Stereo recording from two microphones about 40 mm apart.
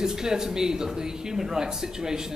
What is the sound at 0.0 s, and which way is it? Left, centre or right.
A man's voice, centre.